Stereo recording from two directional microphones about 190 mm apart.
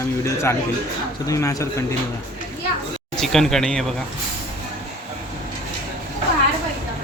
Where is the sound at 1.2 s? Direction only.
15° left (ahead or behind).